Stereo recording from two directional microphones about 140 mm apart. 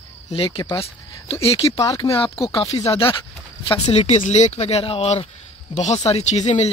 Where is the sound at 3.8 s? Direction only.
50° left (ahead or behind).